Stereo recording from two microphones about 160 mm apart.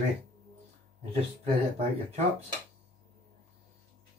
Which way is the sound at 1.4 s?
40° right (ahead or behind).